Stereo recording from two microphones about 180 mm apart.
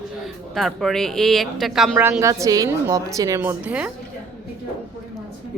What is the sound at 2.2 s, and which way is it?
A woman's voice, 20° right (ahead or behind).